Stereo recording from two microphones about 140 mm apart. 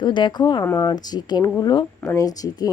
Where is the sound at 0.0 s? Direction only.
35° left (ahead or behind).